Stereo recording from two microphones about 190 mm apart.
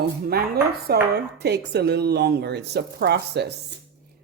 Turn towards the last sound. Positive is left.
turn(degrees=-60)  # may be behind; listen again after turning